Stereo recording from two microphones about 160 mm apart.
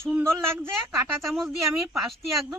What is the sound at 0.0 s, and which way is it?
Speech, 15° right (ahead or behind).